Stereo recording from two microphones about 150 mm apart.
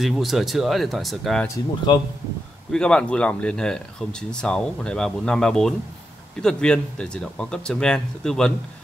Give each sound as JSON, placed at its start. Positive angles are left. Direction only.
{"t": 0.0, "sound": "speech", "side_deg": 0}
{"t": 1.9, "sound": "speech", "side_deg": 30}
{"t": 2.7, "sound": "speech", "side_deg": 5}